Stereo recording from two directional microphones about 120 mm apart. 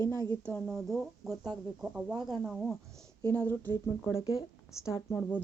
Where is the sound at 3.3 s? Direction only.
15° left (ahead or behind).